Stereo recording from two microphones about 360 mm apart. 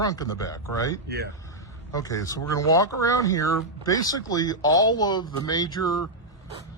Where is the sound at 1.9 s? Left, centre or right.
Centre.